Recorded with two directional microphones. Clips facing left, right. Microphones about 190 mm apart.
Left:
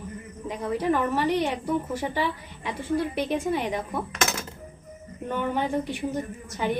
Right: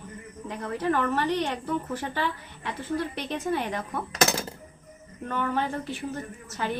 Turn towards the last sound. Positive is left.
turn(degrees=15)  # may be behind; listen again after turning